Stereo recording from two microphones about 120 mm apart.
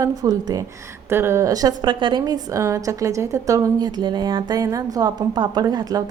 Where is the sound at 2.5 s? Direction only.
25° right (ahead or behind).